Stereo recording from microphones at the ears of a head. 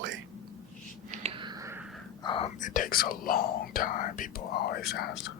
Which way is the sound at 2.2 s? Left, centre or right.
Left.